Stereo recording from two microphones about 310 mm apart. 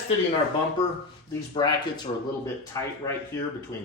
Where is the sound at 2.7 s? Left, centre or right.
Centre.